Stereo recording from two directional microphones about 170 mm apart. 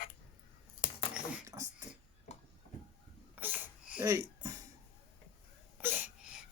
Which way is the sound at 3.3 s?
10° right (ahead or behind).